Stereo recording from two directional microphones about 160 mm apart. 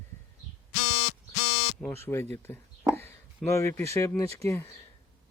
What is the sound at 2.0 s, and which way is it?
Speech, 15° left (ahead or behind).